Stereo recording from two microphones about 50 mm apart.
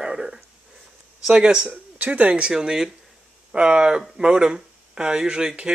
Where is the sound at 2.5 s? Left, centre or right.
Centre.